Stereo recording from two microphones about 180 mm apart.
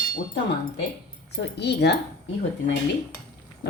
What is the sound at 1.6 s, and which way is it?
Speech, 65° left (ahead or behind).